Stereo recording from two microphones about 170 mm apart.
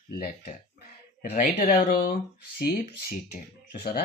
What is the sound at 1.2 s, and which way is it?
Speech, 70° left (ahead or behind).